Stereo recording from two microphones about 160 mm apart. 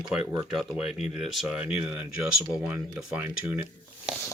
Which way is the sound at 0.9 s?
40° left (ahead or behind).